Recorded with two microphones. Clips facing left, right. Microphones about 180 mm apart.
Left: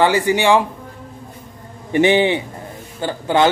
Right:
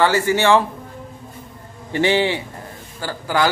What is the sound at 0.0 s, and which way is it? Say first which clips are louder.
Speech: left 1 dB; 15° left (ahead or behind).